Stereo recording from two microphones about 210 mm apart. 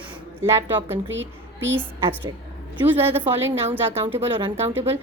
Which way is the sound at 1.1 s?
60° right (ahead or behind).